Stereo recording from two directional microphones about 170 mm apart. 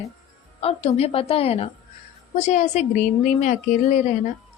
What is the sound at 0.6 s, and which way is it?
A woman's voice, 40° left (ahead or behind).